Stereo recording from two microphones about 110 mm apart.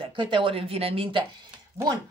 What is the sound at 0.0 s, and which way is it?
Speech, 50° right (ahead or behind).